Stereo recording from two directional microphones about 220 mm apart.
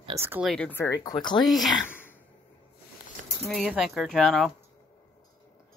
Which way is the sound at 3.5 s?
Centre (ahead or behind).